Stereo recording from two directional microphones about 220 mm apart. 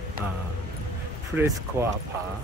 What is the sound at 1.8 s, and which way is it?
Speech, 10° right (ahead or behind).